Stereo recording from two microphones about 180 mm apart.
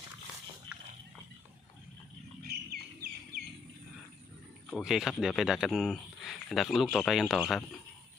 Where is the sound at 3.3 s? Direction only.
70° right (ahead or behind).